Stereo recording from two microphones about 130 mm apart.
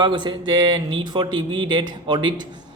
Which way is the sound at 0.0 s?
35° right (ahead or behind).